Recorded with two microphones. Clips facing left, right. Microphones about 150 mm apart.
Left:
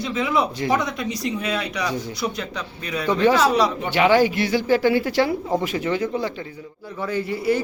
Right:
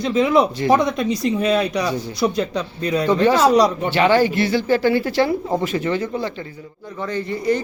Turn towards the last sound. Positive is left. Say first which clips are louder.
# right 1 dB
turn(degrees=10)  # may be behind; listen again after turning